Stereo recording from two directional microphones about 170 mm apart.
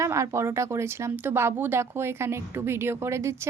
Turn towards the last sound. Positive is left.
turn(degrees=-15)  # may be behind; listen again after turning